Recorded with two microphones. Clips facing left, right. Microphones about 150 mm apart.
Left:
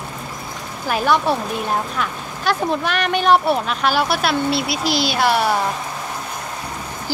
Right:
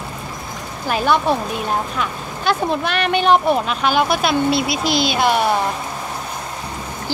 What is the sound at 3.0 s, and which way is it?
Speech, 5° left (ahead or behind).